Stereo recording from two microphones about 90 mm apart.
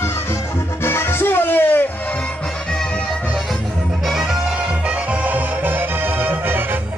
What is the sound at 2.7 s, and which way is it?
Music, 10° left (ahead or behind).